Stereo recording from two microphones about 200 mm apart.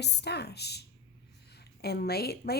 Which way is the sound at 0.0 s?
55° left (ahead or behind).